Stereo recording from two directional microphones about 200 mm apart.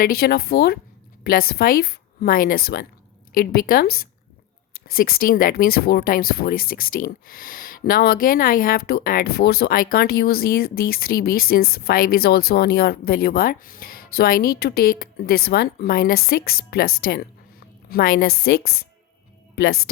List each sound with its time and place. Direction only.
0.0 s speech: 50° left (ahead or behind)